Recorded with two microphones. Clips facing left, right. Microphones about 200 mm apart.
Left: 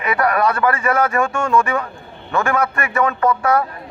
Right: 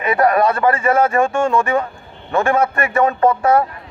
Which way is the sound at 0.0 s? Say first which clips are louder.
Right 3 dB; 30° right (ahead or behind).